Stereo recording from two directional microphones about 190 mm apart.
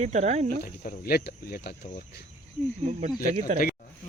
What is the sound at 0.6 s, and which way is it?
Speech, 50° left (ahead or behind).